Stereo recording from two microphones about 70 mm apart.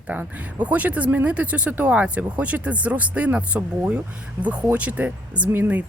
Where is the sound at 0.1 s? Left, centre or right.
Right.